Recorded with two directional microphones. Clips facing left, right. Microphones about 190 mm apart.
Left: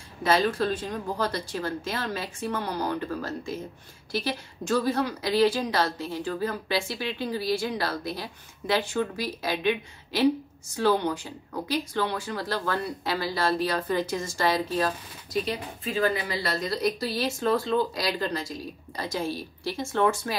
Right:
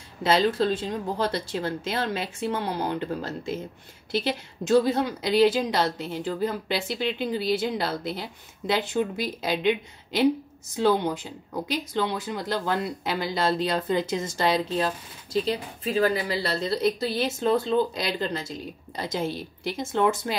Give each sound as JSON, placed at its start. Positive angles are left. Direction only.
{"t": 0.2, "sound": "a woman's voice", "side_deg": -25}
{"t": 15.4, "sound": "a woman's voice", "side_deg": -35}